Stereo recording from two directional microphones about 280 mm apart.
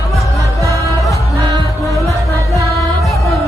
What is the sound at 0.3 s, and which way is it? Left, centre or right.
Music, centre.